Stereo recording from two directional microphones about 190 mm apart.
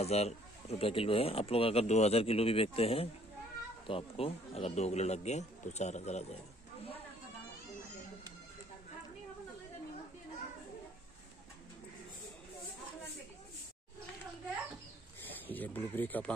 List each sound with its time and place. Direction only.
0.0 s speech: 35° left (ahead or behind)
15.4 s speech: 10° left (ahead or behind)